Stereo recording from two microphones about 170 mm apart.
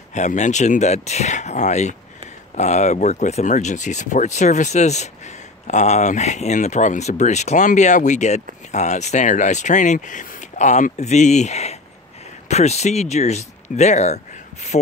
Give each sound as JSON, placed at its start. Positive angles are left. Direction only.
{"t": 0.1, "sound": "speech", "side_deg": 45}